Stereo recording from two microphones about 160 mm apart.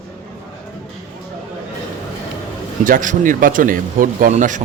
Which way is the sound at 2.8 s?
55° right (ahead or behind).